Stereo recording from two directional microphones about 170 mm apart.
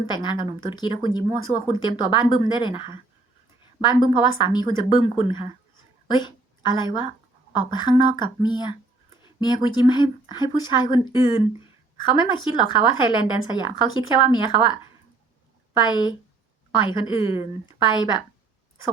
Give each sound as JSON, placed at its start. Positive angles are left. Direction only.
{"t": 0.0, "sound": "a woman's voice", "side_deg": 25}
{"t": 15.8, "sound": "a woman's voice", "side_deg": 25}